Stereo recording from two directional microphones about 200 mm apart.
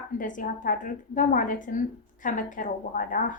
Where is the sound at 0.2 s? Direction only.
40° left (ahead or behind).